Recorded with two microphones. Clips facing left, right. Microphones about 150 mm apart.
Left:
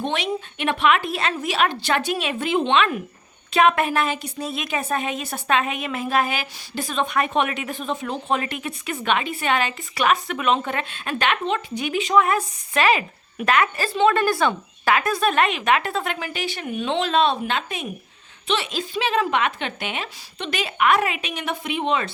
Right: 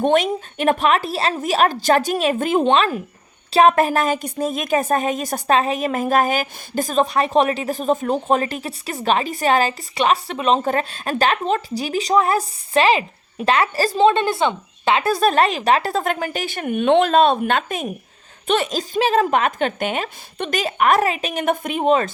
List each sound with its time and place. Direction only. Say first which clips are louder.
0.0 s a woman's voice: right 8 dB; 45° right (ahead or behind)
14.1 s speech: right 1 dB; 25° right (ahead or behind); by 22.1 s 45° right (ahead or behind)